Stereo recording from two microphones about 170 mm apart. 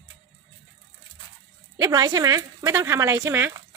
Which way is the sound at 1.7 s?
20° right (ahead or behind).